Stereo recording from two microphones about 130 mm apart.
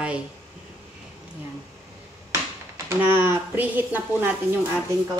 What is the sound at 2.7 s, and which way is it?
Speech, 20° right (ahead or behind).